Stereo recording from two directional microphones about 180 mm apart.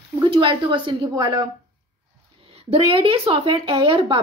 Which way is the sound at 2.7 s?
30° right (ahead or behind).